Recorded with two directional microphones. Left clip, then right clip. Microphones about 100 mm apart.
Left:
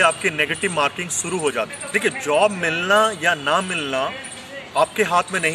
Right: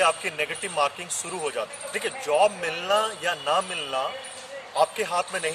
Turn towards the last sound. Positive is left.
turn(degrees=-25)  # may be behind; listen again after turning